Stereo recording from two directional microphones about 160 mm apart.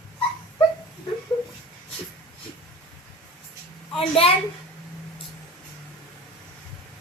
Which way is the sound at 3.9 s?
35° left (ahead or behind).